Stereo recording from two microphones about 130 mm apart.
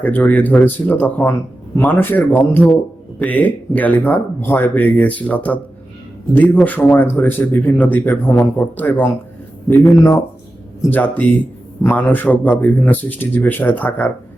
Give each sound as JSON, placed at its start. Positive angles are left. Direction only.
{"t": 0.0, "sound": "speech", "side_deg": 15}